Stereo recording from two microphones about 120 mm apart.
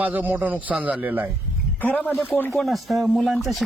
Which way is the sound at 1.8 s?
15° left (ahead or behind).